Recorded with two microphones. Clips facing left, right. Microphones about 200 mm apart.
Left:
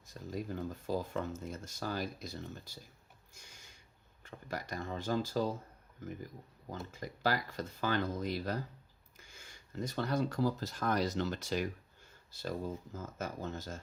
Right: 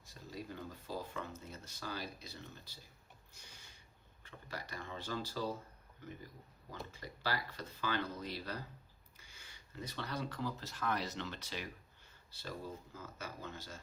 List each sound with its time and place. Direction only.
0.1 s speech: 45° left (ahead or behind)
4.2 s speech: 45° left (ahead or behind)
6.7 s speech: 45° left (ahead or behind)